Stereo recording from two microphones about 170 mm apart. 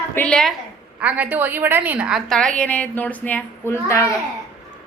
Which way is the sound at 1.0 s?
10° right (ahead or behind).